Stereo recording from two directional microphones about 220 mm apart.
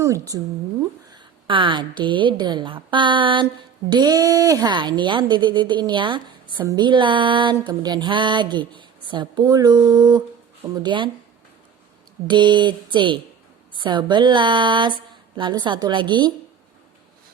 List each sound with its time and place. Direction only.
0.0 s a woman's voice: 15° right (ahead or behind)
12.3 s a woman's voice: 20° right (ahead or behind)